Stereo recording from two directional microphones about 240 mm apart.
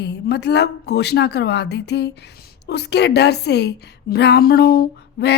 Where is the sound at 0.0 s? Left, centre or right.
Left.